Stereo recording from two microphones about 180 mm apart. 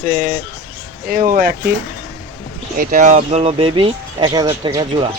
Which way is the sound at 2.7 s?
45° right (ahead or behind).